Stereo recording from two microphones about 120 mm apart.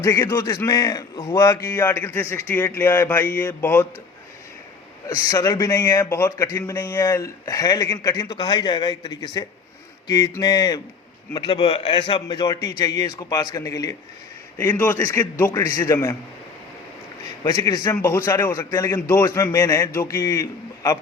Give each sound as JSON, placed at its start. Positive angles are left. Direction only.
{"t": 0.0, "sound": "a man's voice", "side_deg": 25}
{"t": 1.1, "sound": "a man's voice", "side_deg": 45}
{"t": 1.4, "sound": "a man's voice", "side_deg": 25}
{"t": 5.0, "sound": "a man's voice", "side_deg": 30}
{"t": 11.3, "sound": "a man's voice", "side_deg": 50}
{"t": 12.5, "sound": "a man's voice", "side_deg": 30}
{"t": 17.4, "sound": "a man's voice", "side_deg": 35}
{"t": 17.9, "sound": "a man's voice", "side_deg": 15}